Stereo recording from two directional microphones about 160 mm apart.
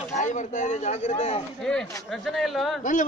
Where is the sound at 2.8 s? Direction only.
50° left (ahead or behind).